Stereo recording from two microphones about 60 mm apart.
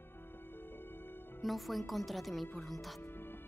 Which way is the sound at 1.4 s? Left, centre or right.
Centre.